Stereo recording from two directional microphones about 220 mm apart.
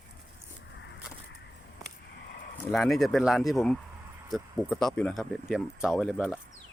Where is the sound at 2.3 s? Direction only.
45° left (ahead or behind).